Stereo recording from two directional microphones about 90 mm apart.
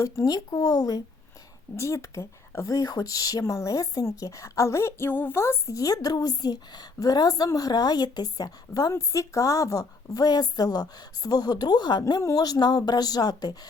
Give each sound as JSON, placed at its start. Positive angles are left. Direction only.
{"t": 0.0, "sound": "a woman's voice", "side_deg": 40}
{"t": 1.7, "sound": "a woman's voice", "side_deg": 35}